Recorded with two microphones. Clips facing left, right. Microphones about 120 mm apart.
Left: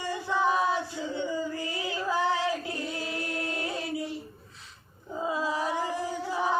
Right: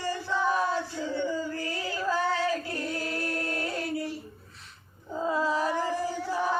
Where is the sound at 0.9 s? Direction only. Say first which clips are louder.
Right 1 dB; 15° left (ahead or behind).